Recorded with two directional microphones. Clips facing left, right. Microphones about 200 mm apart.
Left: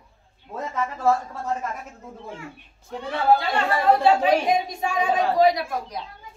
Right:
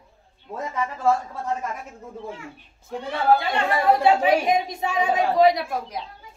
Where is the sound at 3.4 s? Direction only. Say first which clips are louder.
Even; 15° right (ahead or behind).